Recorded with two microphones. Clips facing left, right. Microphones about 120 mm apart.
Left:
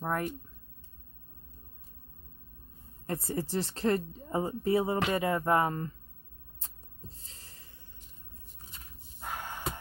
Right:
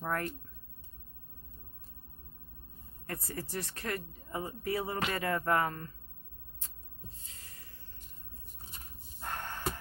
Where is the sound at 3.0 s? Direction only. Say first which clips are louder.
Left 7 dB; 25° left (ahead or behind).